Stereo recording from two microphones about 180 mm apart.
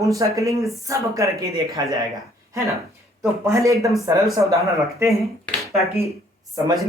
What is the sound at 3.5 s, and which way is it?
Speech, 15° right (ahead or behind).